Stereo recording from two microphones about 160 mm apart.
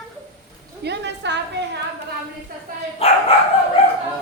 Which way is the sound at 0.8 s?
90° right.